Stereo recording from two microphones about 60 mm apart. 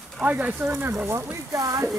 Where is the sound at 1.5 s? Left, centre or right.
Right.